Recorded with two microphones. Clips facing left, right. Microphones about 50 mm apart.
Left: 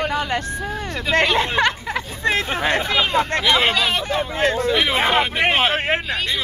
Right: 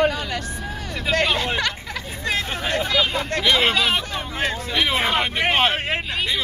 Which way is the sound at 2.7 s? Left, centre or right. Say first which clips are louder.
Left 1 dB; left.